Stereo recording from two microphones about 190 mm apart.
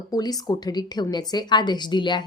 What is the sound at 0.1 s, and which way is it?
A woman's voice, 20° left (ahead or behind).